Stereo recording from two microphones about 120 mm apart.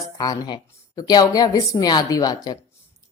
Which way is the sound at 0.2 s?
35° left (ahead or behind).